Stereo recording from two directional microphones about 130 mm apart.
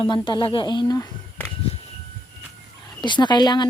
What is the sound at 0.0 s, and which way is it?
Speech, 40° left (ahead or behind).